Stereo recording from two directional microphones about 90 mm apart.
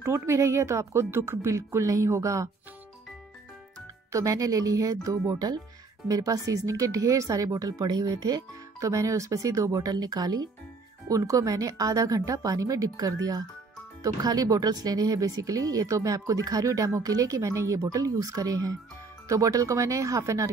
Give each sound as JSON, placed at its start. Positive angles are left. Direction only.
{"t": 0.0, "sound": "speech", "side_deg": -30}
{"t": 4.1, "sound": "speech", "side_deg": -40}